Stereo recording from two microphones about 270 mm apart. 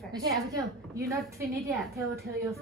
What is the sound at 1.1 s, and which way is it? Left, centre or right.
Speech, centre.